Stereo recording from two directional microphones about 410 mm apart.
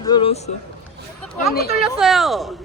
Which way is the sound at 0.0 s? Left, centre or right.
Centre.